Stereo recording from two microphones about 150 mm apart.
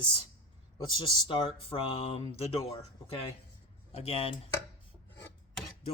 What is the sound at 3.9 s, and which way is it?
Speech, 40° left (ahead or behind).